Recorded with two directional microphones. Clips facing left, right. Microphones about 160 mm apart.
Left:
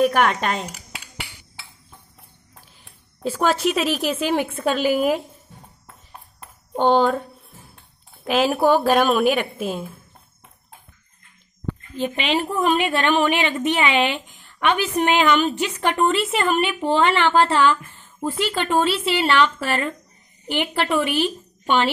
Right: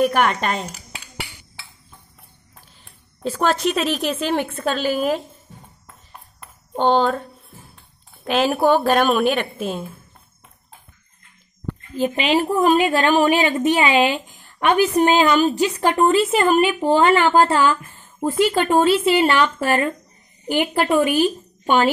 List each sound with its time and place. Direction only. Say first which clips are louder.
0.0 s a woman's voice: even; centre (ahead or behind)
3.3 s a woman's voice: even; 5° left (ahead or behind)
6.7 s a woman's voice: even; 10° left (ahead or behind)
12.0 s a woman's voice: right 4 dB; 40° right (ahead or behind)